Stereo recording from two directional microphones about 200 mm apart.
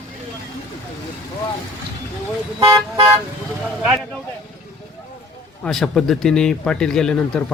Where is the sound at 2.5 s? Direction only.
20° right (ahead or behind).